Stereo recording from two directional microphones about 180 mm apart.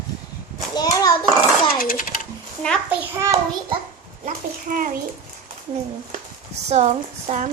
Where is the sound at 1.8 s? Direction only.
50° left (ahead or behind).